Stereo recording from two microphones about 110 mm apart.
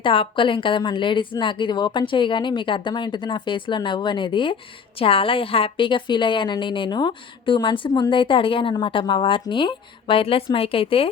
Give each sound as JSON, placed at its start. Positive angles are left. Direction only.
{"t": 0.0, "sound": "a woman's voice", "side_deg": 50}